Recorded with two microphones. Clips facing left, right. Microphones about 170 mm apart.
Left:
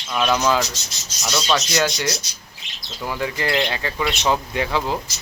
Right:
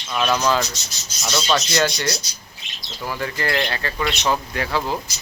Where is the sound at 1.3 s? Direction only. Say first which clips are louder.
Even; 5° right (ahead or behind).